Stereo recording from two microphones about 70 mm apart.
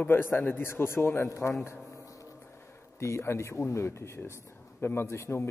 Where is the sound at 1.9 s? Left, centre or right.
Left.